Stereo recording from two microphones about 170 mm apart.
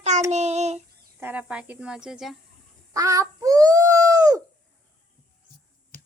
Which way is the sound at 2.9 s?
20° right (ahead or behind).